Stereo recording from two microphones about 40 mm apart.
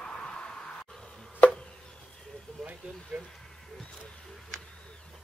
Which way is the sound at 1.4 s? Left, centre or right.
Left.